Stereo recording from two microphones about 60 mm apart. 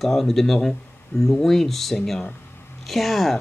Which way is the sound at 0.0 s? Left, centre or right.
Centre.